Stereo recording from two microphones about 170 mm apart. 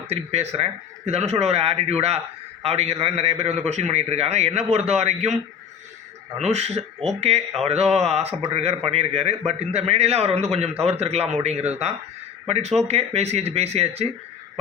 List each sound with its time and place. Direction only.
0.1 s a man's voice: 35° right (ahead or behind)
6.4 s a man's voice: 40° right (ahead or behind)